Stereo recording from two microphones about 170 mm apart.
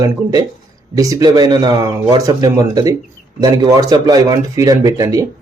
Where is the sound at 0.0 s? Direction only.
25° right (ahead or behind).